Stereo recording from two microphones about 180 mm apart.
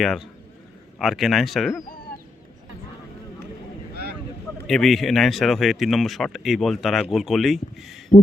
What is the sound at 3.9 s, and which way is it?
Vehicle, 65° right (ahead or behind).